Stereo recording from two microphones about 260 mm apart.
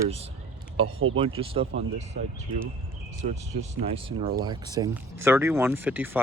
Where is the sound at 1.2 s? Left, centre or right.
Right.